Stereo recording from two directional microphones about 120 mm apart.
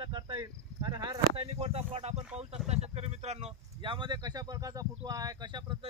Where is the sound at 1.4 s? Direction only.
55° right (ahead or behind).